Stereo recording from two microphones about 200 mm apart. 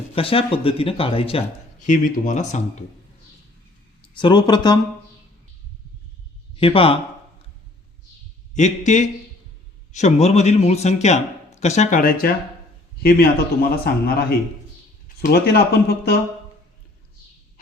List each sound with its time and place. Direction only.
0.2 s speech: 25° left (ahead or behind)
1.9 s speech: 40° left (ahead or behind)
4.0 s speech: 25° left (ahead or behind)
6.6 s speech: 25° left (ahead or behind)
8.5 s a man's voice: 35° left (ahead or behind); by 16.1 s 50° left (ahead or behind)